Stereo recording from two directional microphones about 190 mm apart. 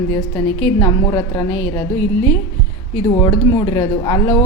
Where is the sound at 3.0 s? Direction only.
20° left (ahead or behind).